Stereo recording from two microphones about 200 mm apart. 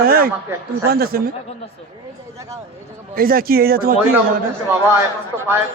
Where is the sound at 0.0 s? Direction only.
45° right (ahead or behind).